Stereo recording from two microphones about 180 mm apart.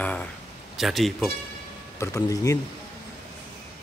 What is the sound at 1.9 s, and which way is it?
Speech, 15° left (ahead or behind).